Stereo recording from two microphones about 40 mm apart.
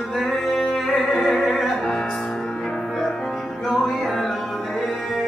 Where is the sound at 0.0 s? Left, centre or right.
Centre.